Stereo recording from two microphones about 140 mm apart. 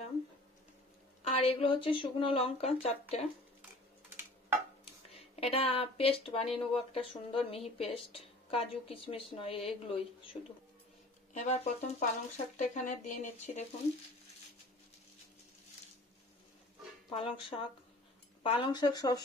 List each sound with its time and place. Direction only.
1.2 s speech: 45° left (ahead or behind)
5.1 s speech: 45° left (ahead or behind)
11.3 s speech: 55° left (ahead or behind)
17.1 s speech: 40° left (ahead or behind)